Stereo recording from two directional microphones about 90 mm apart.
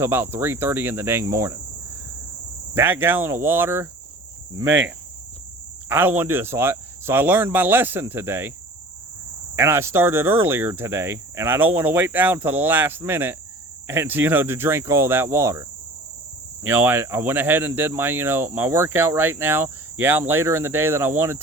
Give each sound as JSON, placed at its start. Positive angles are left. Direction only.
{"t": 0.0, "sound": "speech", "side_deg": -25}
{"t": 2.7, "sound": "speech", "side_deg": -25}
{"t": 9.6, "sound": "speech", "side_deg": -30}
{"t": 16.6, "sound": "speech", "side_deg": -25}